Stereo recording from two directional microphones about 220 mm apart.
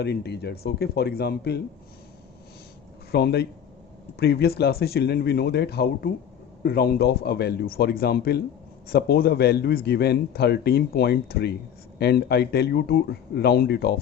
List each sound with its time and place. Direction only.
0.0 s speech: 50° left (ahead or behind)
3.1 s speech: 45° left (ahead or behind)